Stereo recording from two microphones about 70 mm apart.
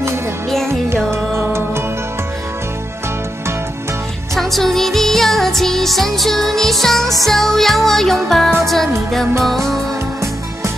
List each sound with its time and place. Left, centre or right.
1.1 s music: right
4.4 s music: centre